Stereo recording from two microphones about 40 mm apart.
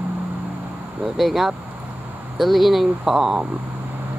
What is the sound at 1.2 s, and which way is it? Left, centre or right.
Speech, centre.